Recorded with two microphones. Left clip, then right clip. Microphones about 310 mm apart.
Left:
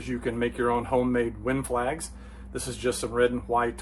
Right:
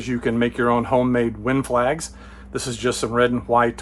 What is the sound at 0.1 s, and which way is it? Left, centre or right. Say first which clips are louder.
Speech: right 7 dB; right.